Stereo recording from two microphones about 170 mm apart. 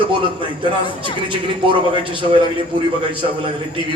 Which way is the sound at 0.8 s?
30° left (ahead or behind).